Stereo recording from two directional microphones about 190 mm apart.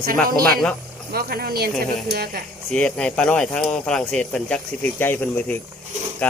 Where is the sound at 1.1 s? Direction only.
55° right (ahead or behind).